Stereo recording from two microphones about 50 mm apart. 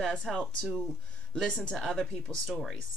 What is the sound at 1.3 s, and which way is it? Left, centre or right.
Speech, centre.